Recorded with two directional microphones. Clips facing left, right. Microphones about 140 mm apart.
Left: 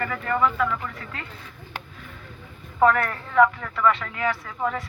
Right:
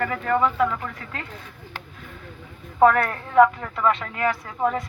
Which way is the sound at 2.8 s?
40° right (ahead or behind).